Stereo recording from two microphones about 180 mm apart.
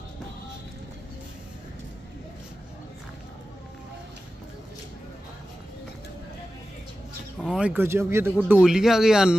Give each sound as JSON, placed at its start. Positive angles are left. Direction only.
{"t": 7.3, "sound": "a man's voice", "side_deg": -5}